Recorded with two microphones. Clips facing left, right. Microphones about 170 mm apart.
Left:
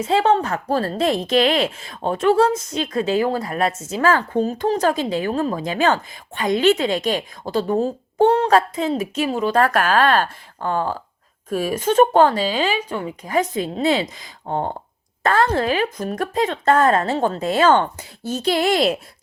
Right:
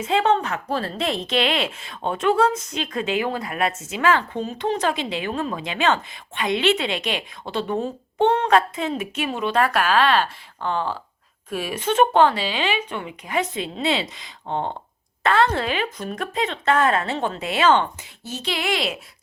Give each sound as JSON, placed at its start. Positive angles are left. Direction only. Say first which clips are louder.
{"t": 0.0, "sound": "a woman's voice", "louder": "left 3 dB", "side_deg": 35}
{"t": 14.5, "sound": "speech", "louder": "left 2 dB", "side_deg": 10}
{"t": 15.2, "sound": "a woman's voice", "louder": "left 2 dB", "side_deg": 40}